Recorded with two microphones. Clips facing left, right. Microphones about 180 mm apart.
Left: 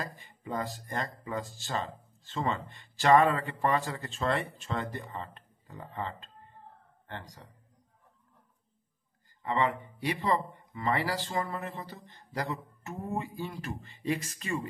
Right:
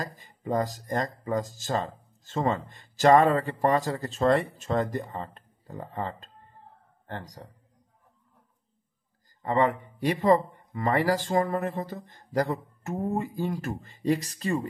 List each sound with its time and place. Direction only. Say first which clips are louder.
0.0 s speech: right 4 dB; 40° right (ahead or behind)
9.4 s speech: right 5 dB; 45° right (ahead or behind)